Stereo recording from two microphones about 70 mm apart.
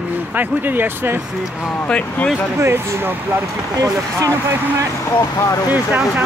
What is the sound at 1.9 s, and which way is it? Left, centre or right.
Speech, centre.